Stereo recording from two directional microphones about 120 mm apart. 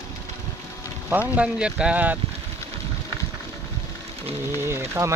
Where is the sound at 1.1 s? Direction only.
15° right (ahead or behind).